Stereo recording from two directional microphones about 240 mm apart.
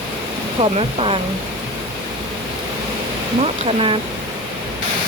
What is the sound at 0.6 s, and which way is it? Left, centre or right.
Speech, right.